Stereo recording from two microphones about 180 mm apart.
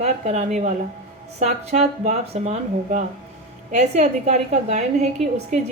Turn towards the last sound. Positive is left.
turn(degrees=-40)  # may be behind; listen again after turning